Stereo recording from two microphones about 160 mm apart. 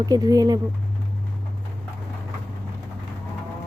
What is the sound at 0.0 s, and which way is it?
Speech, 20° right (ahead or behind).